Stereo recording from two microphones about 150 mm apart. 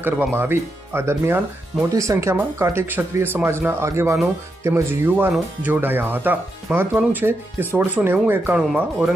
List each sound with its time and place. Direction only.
0.0 s speech: 15° right (ahead or behind)